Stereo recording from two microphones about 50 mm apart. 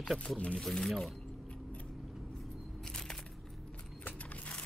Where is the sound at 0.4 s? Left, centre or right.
Left.